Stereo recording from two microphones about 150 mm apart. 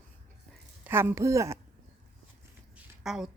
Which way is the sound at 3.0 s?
Centre (ahead or behind).